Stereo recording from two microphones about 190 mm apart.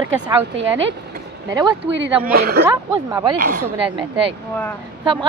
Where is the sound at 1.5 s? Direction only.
20° right (ahead or behind).